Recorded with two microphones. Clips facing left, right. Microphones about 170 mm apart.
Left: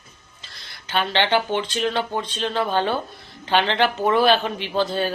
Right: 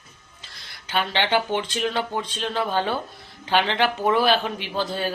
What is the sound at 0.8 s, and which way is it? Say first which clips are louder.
Speech: left 2 dB; 10° right (ahead or behind).